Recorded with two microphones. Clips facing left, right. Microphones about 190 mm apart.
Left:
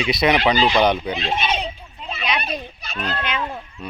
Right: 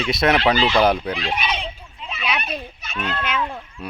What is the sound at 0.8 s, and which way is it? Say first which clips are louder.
Speech: even; 5° right (ahead or behind).